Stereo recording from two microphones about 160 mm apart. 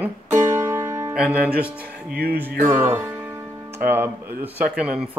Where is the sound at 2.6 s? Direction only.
15° right (ahead or behind).